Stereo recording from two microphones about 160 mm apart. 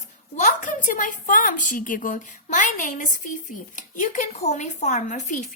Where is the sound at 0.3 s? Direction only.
50° left (ahead or behind).